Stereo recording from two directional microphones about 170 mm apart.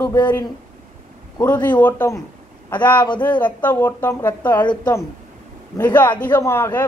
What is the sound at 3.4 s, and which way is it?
Speech, 10° left (ahead or behind).